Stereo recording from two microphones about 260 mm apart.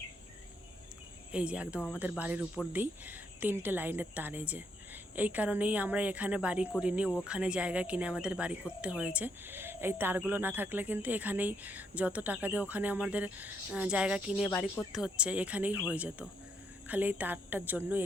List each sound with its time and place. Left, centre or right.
1.3 s speech: centre